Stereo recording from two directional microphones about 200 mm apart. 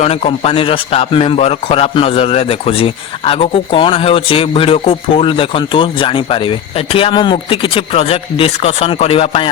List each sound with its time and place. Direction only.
0.0 s a man's voice: 30° left (ahead or behind)